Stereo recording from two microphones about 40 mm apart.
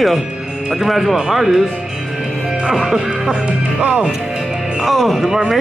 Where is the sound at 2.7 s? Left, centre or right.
Centre.